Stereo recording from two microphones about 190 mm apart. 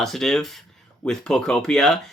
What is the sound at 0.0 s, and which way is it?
Speech, centre (ahead or behind).